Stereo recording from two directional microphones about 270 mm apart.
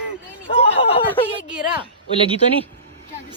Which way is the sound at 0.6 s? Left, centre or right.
Left.